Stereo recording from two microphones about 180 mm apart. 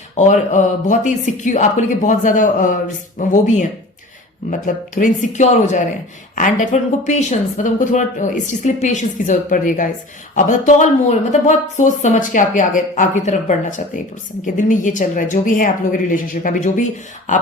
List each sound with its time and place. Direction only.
0.2 s speech: 45° left (ahead or behind)